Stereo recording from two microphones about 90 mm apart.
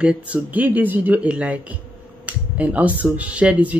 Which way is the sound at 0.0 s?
15° right (ahead or behind).